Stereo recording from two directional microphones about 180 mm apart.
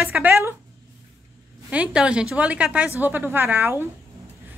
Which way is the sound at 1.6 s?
5° right (ahead or behind).